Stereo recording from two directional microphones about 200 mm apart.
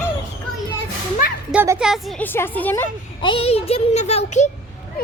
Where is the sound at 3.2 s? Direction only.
25° left (ahead or behind).